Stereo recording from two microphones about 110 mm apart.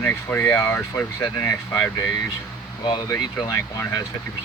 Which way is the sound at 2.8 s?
40° left (ahead or behind).